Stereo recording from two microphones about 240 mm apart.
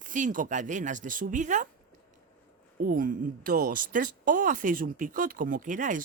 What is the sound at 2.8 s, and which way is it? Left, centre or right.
Speech, right.